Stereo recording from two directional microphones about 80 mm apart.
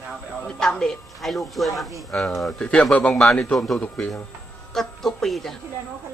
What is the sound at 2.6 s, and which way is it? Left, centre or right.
Speech, centre.